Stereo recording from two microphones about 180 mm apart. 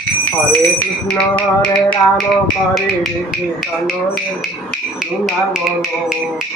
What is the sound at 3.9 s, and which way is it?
Speech, centre (ahead or behind).